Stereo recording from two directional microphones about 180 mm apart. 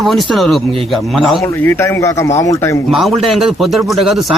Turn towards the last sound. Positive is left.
turn(degrees=0)  # may be behind; listen again after turning